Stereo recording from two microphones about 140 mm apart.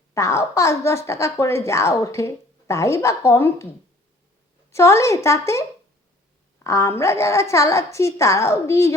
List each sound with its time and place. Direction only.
0.1 s a woman's voice: 20° left (ahead or behind)
4.7 s a woman's voice: 20° left (ahead or behind)
6.7 s a woman's voice: 20° left (ahead or behind)